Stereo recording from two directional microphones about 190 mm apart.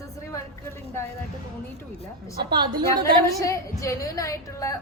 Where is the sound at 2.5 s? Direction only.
25° right (ahead or behind).